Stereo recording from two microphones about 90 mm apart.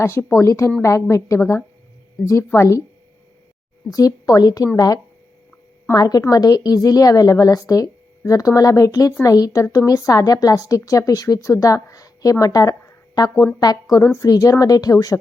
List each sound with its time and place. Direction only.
0.0 s a woman's voice: 30° left (ahead or behind)
3.8 s a woman's voice: 40° left (ahead or behind)
5.9 s a woman's voice: 45° left (ahead or behind)